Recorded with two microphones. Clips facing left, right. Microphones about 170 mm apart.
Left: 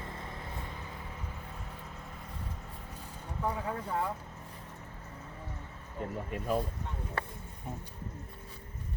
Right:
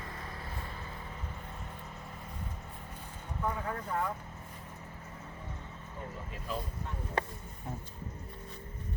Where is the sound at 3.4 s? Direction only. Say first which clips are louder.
Left 1 dB; 10° left (ahead or behind).